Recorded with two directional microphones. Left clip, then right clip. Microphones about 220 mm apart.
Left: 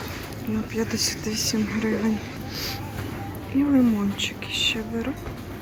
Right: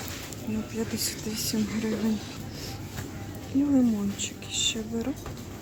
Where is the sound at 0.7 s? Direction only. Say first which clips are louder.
Left 7 dB; 15° right (ahead or behind).